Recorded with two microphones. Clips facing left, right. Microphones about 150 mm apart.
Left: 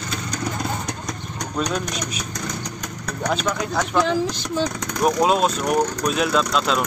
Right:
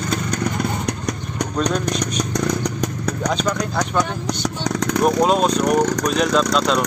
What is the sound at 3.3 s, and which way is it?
Speech, 5° left (ahead or behind).